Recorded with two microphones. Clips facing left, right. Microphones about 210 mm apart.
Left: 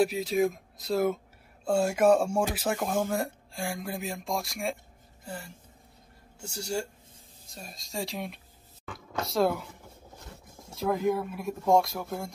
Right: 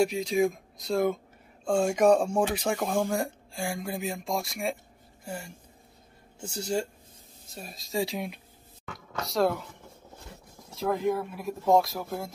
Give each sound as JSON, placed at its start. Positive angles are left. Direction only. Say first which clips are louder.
{"t": 0.0, "sound": "speech", "louder": "right 1 dB", "side_deg": 5}
{"t": 5.2, "sound": "speech", "louder": "right 2 dB", "side_deg": -10}
{"t": 7.4, "sound": "speech", "louder": "right 3 dB", "side_deg": 0}
{"t": 10.7, "sound": "speech", "louder": "even", "side_deg": 0}